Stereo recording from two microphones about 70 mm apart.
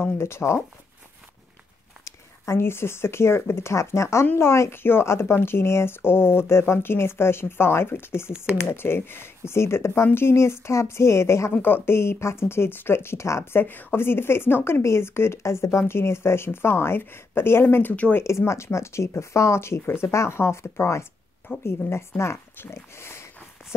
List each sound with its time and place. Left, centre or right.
0.0 s speech: left
2.0 s speech: left
11.6 s speech: left